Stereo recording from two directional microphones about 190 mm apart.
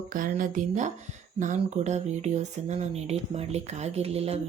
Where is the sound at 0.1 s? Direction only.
45° right (ahead or behind).